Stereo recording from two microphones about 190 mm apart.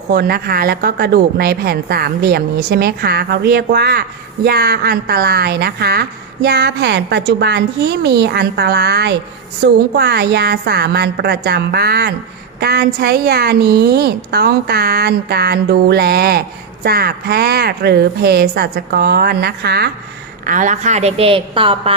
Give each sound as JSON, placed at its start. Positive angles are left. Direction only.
{"t": 0.1, "sound": "a woman's voice", "side_deg": -55}
{"t": 20.4, "sound": "a woman's voice", "side_deg": -40}